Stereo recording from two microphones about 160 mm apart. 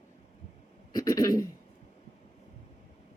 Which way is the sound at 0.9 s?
20° left (ahead or behind).